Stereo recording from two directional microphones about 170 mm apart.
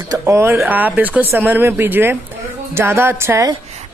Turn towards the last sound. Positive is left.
turn(degrees=-15)  # may be behind; listen again after turning